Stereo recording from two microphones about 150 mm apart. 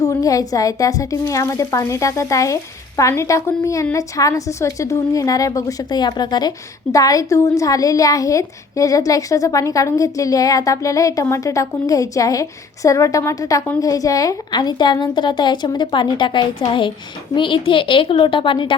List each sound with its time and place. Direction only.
0.0 s a woman's voice: 25° left (ahead or behind)